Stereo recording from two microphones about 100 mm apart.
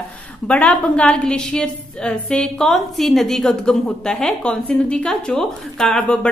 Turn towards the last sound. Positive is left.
turn(degrees=10)  # may be behind; listen again after turning